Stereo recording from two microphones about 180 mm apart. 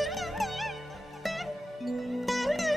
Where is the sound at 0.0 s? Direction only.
Centre (ahead or behind).